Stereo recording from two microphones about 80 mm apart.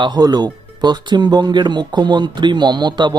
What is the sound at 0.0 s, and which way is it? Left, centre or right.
Speech, right.